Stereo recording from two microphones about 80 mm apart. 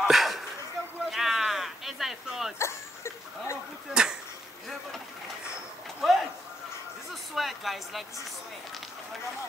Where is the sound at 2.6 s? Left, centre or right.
Left.